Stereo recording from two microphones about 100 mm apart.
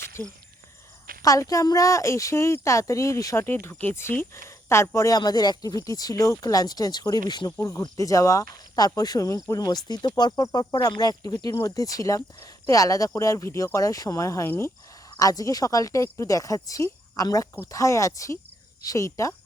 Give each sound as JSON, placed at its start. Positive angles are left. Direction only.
{"t": 1.2, "sound": "speech", "side_deg": 35}
{"t": 4.9, "sound": "speech", "side_deg": 35}
{"t": 7.6, "sound": "speech", "side_deg": 35}